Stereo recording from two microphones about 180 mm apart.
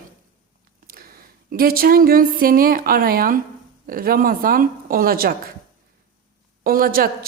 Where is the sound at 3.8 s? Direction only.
55° right (ahead or behind).